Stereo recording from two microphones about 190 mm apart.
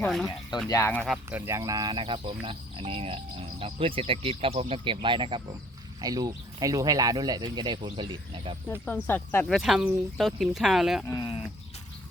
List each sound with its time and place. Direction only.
0.0 s speech: centre (ahead or behind)
0.7 s speech: 15° left (ahead or behind)
1.0 s speech: 5° right (ahead or behind); by 8.5 s 25° right (ahead or behind)
8.7 s speech: 10° left (ahead or behind)
9.6 s speech: 5° right (ahead or behind)
11.0 s speech: 20° left (ahead or behind)